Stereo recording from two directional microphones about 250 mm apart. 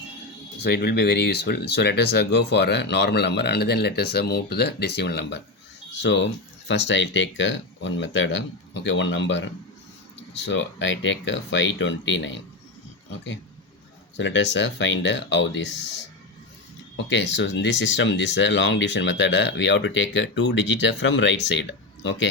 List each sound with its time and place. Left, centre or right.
0.6 s speech: left
6.7 s speech: left
14.2 s speech: left
17.1 s speech: left